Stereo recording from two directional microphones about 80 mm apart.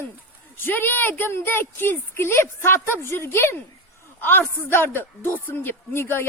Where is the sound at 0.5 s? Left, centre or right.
Left.